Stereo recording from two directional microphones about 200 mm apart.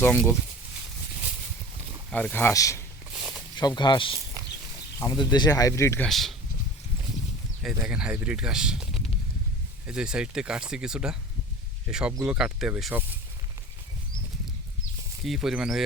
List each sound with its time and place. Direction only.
0.0 s speech: 10° left (ahead or behind)
2.0 s speech: 5° left (ahead or behind)
3.1 s a sound: 5° right (ahead or behind)
3.5 s speech: 20° left (ahead or behind)
6.1 s speech: centre (ahead or behind)
7.9 s speech: 5° right (ahead or behind)
15.2 s speech: centre (ahead or behind)